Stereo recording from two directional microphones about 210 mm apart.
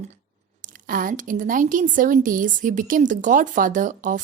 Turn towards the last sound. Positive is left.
turn(degrees=-40)  # may be behind; listen again after turning